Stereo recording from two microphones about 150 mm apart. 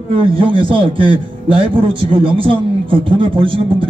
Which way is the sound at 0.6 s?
35° right (ahead or behind).